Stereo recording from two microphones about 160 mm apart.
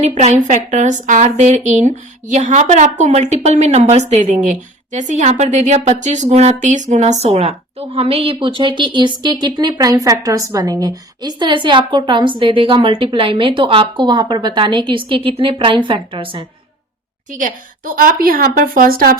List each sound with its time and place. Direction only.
0.0 s a woman's voice: 45° right (ahead or behind)
17.3 s a woman's voice: 55° right (ahead or behind)